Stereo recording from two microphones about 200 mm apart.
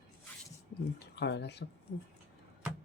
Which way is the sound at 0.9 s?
60° left (ahead or behind).